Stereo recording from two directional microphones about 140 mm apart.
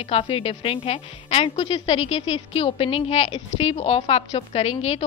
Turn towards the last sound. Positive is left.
turn(degrees=50)  # may be behind; listen again after turning